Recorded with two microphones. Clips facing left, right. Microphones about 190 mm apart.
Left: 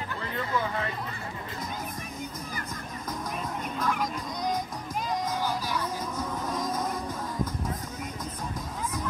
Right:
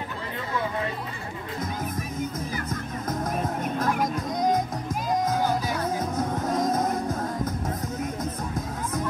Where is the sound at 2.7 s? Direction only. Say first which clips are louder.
Right 6 dB; 45° right (ahead or behind).